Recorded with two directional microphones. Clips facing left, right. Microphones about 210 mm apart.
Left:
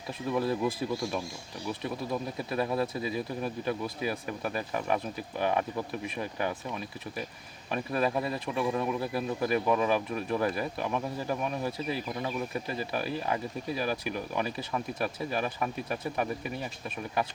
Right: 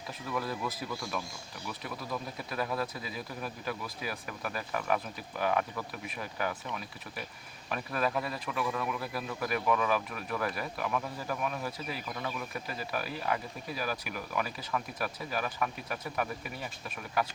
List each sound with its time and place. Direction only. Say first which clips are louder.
0.3 s speech: left 7 dB; 25° left (ahead or behind)